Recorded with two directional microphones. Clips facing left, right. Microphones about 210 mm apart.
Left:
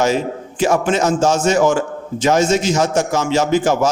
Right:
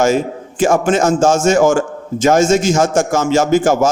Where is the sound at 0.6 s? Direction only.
50° right (ahead or behind).